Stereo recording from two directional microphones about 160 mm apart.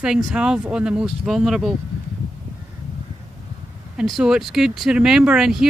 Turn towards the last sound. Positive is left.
turn(degrees=-5)  # may be behind; listen again after turning